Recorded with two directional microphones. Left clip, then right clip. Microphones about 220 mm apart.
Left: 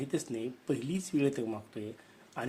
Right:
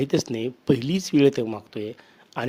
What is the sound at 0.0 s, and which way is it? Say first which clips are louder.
Speech: right 11 dB; 45° right (ahead or behind).